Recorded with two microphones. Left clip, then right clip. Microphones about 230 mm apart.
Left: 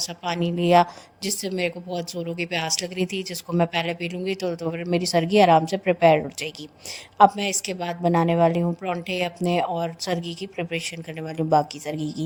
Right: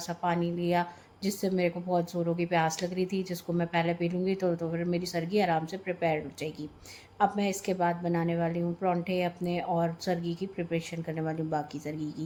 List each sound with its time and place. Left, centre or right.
0.0 s a woman's voice: left